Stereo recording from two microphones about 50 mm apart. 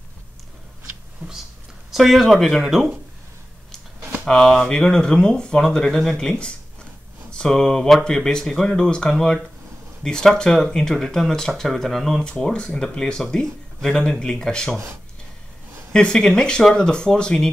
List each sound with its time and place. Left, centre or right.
1.9 s speech: centre
4.3 s speech: centre
15.9 s speech: centre